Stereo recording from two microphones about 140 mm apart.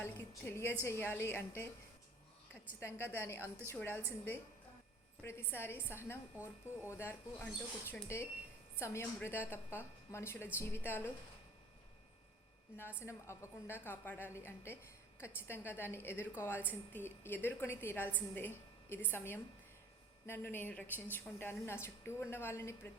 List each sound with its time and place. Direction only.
0.0 s a woman's voice: 15° left (ahead or behind)
2.8 s a woman's voice: 15° left (ahead or behind)
13.1 s a woman's voice: 20° left (ahead or behind)